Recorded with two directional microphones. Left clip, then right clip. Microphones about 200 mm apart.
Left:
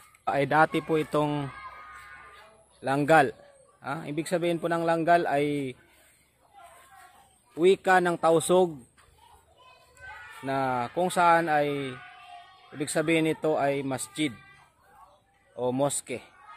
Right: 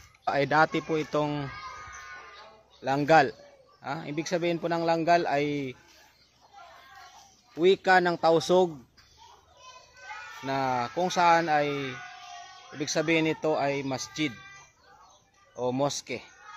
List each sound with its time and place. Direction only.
0.2 s a man's voice: 15° left (ahead or behind)
2.8 s a man's voice: 20° left (ahead or behind)
7.5 s a man's voice: 10° left (ahead or behind)
10.4 s a man's voice: 15° left (ahead or behind)
15.5 s a man's voice: 10° left (ahead or behind)